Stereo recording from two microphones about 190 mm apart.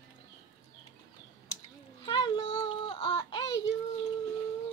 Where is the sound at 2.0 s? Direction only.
25° left (ahead or behind).